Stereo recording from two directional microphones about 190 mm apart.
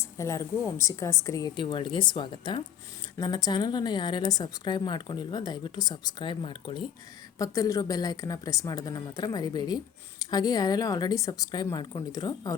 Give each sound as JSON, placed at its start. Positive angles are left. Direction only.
{"t": 0.0, "sound": "a woman's voice", "side_deg": 15}